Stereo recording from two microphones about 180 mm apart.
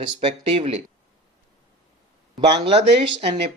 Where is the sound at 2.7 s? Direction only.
35° right (ahead or behind).